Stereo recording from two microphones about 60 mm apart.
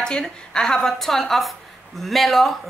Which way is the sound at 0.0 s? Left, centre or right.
Centre.